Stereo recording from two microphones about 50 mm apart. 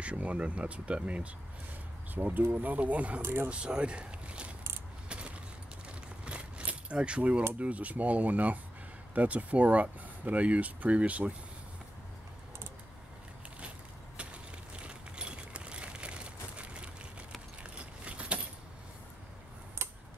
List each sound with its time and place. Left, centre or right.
0.0 s speech: right
2.1 s speech: right
3.2 s speech: right
3.4 s speech: right
6.2 s a sound: right
7.5 s speech: right
14.1 s a sound: right